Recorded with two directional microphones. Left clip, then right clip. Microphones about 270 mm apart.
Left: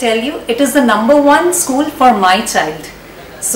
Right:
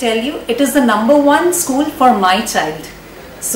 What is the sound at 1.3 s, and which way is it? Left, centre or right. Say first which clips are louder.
A woman's voice: left 2 dB; centre.